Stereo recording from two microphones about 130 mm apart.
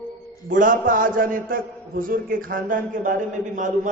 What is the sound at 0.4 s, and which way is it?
A man's voice, 90° right.